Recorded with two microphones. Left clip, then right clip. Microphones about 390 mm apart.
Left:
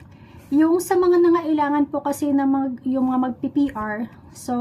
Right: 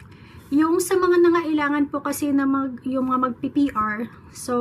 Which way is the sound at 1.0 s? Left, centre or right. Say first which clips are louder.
Even; centre.